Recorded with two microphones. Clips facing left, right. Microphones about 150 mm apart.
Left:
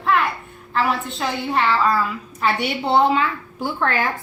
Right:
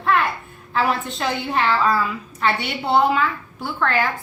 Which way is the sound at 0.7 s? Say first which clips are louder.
Even; centre (ahead or behind).